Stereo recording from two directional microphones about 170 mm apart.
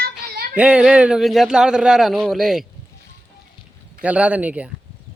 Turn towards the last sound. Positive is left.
turn(degrees=-10)  # may be behind; listen again after turning